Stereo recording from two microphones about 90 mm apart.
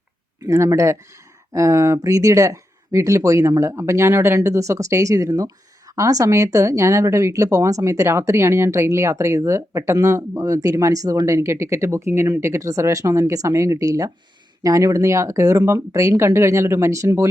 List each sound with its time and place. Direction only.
0.4 s speech: 40° right (ahead or behind)